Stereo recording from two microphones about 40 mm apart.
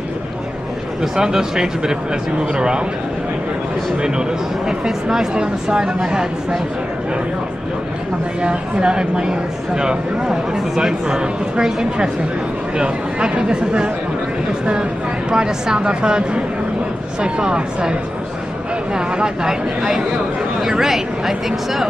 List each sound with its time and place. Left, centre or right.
1.0 s speech: centre
4.0 s speech: centre
8.4 s speech: right
15.3 s speech: centre
18.9 s speech: centre